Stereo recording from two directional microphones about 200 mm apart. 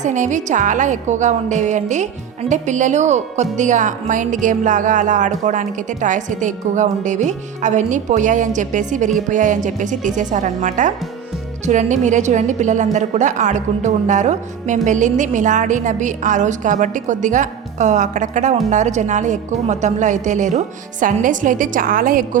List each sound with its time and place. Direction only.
0.0 s a woman's voice: 40° right (ahead or behind)